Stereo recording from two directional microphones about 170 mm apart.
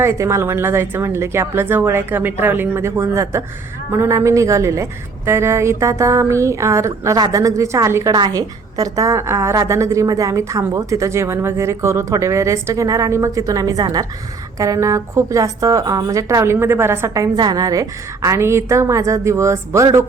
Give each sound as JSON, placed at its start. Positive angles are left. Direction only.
{"t": 0.0, "sound": "a woman's voice", "side_deg": -15}